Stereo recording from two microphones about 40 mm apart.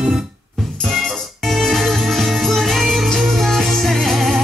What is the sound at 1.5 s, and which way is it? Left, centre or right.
Music, centre.